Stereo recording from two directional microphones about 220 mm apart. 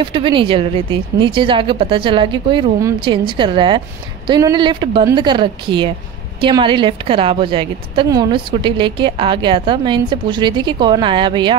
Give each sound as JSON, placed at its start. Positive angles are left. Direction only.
{"t": 0.0, "sound": "a woman's voice", "side_deg": -25}